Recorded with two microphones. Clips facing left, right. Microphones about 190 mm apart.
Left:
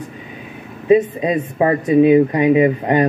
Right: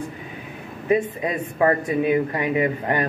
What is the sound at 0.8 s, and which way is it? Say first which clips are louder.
Speech: left 8 dB; 20° left (ahead or behind).